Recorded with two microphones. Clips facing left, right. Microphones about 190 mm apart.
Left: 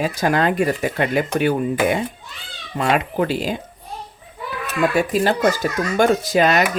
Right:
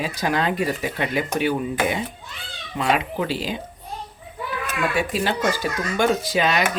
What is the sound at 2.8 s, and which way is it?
Speech, 50° left (ahead or behind).